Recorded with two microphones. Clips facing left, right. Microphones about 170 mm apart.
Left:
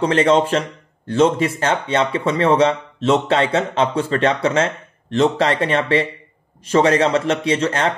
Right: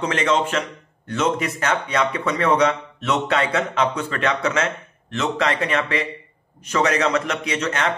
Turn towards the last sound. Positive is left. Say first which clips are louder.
# left 5 dB
turn(degrees=30)  # may be behind; listen again after turning